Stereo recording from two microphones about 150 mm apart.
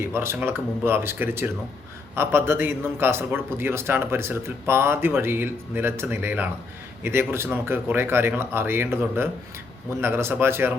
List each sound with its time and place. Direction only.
0.0 s a man's voice: 15° right (ahead or behind)